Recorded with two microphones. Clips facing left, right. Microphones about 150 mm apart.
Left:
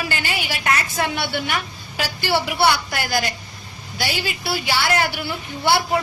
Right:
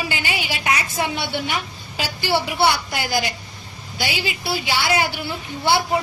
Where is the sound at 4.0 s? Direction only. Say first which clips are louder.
Even; 15° right (ahead or behind).